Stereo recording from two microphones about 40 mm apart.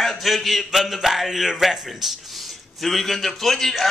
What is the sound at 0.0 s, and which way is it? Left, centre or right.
Speech, centre.